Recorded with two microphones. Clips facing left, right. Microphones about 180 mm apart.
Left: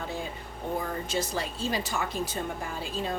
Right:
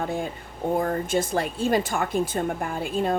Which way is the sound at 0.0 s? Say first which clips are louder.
Right 7 dB; 50° right (ahead or behind).